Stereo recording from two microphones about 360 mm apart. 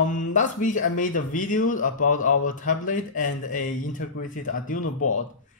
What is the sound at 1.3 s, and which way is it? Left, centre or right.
Speech, left.